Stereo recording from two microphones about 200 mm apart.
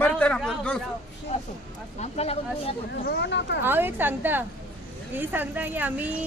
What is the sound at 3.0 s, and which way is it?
Speech, 55° left (ahead or behind).